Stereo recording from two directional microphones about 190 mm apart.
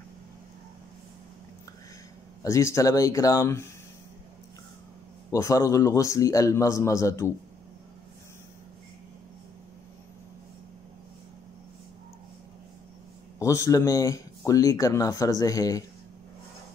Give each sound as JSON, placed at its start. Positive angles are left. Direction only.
{"t": 2.4, "sound": "speech", "side_deg": 15}
{"t": 5.3, "sound": "speech", "side_deg": 15}
{"t": 13.4, "sound": "speech", "side_deg": 15}